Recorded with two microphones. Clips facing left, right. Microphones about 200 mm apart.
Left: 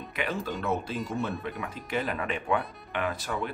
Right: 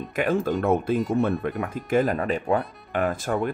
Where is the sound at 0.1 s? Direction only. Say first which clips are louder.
Right 9 dB; 50° right (ahead or behind).